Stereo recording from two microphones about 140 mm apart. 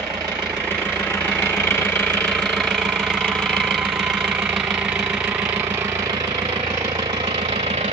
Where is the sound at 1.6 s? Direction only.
15° left (ahead or behind).